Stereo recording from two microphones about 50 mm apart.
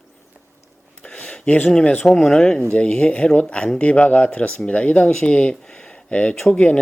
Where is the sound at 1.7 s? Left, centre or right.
Centre.